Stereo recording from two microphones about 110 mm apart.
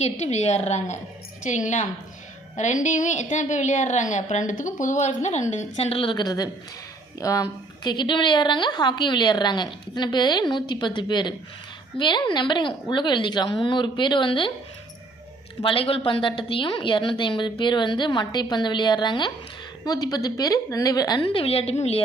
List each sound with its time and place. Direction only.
0.0 s a woman's voice: 90° left
6.0 s a woman's voice: 45° left (ahead or behind)
7.9 s a woman's voice: 45° left (ahead or behind)
15.6 s a woman's voice: 55° left (ahead or behind); by 21.2 s 35° left (ahead or behind)
21.3 s a woman's voice: 65° left (ahead or behind)